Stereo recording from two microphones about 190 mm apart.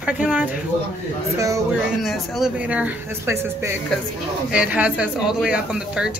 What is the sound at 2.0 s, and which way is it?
Speech, 5° right (ahead or behind).